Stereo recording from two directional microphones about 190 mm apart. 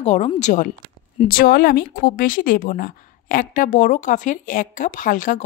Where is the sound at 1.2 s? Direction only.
50° left (ahead or behind).